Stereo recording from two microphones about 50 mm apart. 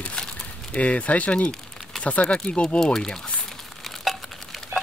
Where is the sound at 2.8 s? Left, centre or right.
Centre.